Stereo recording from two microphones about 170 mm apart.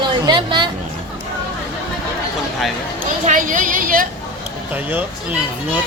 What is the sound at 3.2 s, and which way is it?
Speech, 50° right (ahead or behind).